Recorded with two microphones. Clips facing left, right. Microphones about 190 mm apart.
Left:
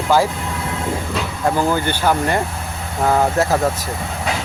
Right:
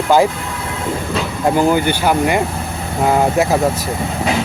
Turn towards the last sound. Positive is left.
turn(degrees=-15)  # may be behind; listen again after turning